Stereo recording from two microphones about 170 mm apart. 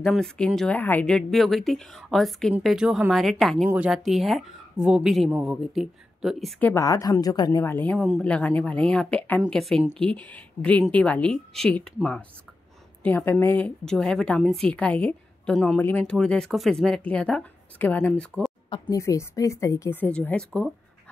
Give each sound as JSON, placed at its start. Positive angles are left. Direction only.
{"t": 0.0, "sound": "a woman's voice", "side_deg": 5}
{"t": 6.6, "sound": "a woman's voice", "side_deg": 20}
{"t": 18.7, "sound": "speech", "side_deg": 20}